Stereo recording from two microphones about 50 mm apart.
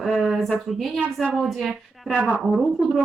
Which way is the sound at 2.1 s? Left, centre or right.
Right.